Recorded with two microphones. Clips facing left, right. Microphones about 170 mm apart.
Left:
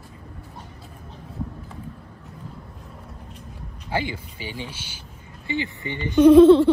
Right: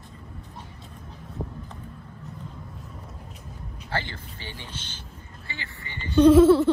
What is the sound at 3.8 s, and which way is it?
Speech, 10° left (ahead or behind).